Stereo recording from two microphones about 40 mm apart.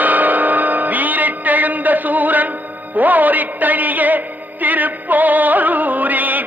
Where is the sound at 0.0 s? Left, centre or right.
Right.